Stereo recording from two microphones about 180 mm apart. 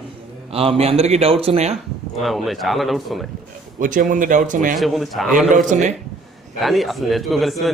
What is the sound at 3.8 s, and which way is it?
Speech, 45° right (ahead or behind).